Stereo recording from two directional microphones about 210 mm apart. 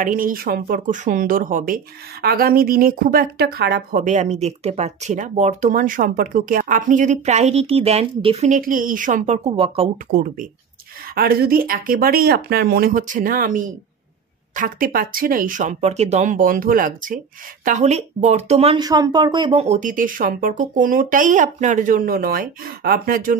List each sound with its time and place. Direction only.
0.0 s speech: 40° right (ahead or behind)
10.1 s speech: 40° right (ahead or behind)
18.9 s speech: 20° right (ahead or behind); by 23.3 s 45° right (ahead or behind)